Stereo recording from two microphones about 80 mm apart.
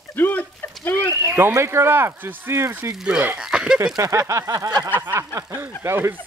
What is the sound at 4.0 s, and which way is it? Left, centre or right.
Speech, right.